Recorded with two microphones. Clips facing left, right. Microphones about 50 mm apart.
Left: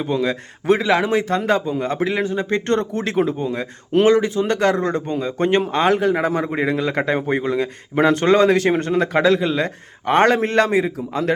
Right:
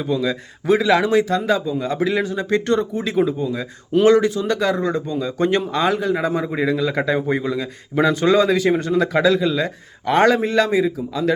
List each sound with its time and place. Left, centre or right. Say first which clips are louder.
0.0 s a man's voice: even; left
0.8 s speech: right 2 dB; left
1.5 s a man's voice: left 1 dB; left
2.0 s speech: even; left
2.9 s a man's voice: even; left
4.0 s speech: right 2 dB; left
4.4 s a man's voice: left 2 dB; left
5.9 s a man's voice: left 2 dB; left
6.4 s a man's voice: even; left
8.8 s a man's voice: even; left
10.4 s a man's voice: even; left